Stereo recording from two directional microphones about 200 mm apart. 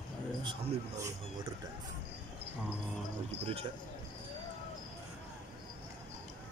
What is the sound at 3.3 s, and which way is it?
Speech, 30° right (ahead or behind).